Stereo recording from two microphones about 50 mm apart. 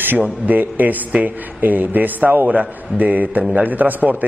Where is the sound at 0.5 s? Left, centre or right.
Right.